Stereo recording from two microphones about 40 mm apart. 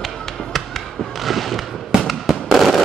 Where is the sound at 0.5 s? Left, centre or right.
Centre.